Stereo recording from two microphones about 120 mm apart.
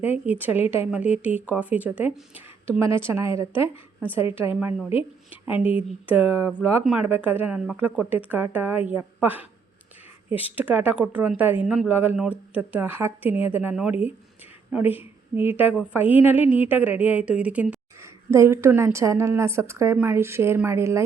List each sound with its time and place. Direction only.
0.0 s a woman's voice: 15° right (ahead or behind)
5.5 s a woman's voice: 10° right (ahead or behind)
18.0 s a woman's voice: 25° right (ahead or behind)